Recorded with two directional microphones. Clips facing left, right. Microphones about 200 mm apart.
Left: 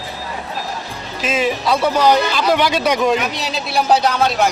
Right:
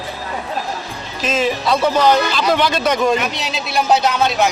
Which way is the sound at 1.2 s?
5° left (ahead or behind).